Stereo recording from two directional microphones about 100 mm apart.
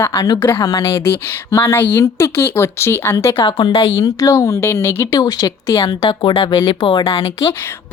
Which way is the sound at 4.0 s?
35° left (ahead or behind).